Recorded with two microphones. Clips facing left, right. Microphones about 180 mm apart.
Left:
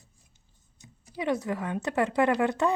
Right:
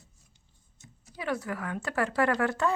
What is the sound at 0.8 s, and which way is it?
Speech, 15° left (ahead or behind).